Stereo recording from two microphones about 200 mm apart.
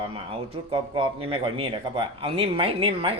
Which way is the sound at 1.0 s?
25° right (ahead or behind).